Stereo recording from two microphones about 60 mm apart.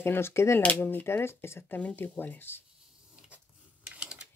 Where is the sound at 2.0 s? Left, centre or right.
Left.